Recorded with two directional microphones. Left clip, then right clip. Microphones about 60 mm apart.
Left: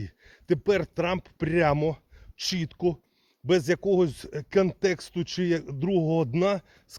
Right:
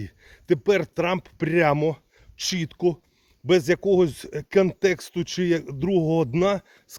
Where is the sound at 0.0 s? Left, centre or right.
Right.